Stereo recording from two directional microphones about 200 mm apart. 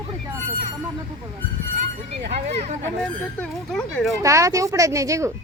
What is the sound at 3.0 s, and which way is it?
Speech, 5° left (ahead or behind).